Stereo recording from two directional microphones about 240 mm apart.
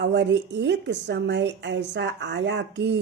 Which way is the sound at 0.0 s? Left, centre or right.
Right.